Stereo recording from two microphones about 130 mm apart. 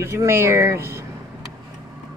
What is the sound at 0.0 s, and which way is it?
Speech, 20° right (ahead or behind).